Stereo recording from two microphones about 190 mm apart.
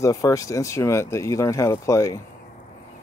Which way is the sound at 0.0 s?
15° left (ahead or behind).